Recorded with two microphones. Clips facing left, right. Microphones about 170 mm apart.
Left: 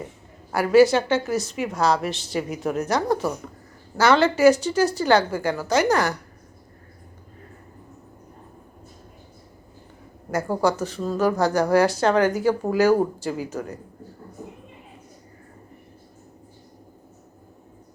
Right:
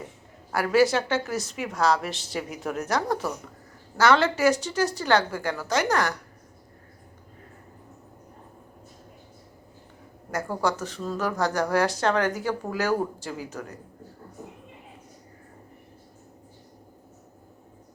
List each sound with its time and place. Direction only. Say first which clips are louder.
0.5 s a woman's voice: left 5 dB; centre (ahead or behind)
10.6 s a woman's voice: left 4 dB; 5° left (ahead or behind)